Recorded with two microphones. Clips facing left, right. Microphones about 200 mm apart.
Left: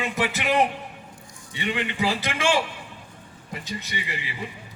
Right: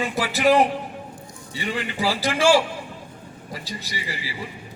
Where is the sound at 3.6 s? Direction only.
35° right (ahead or behind).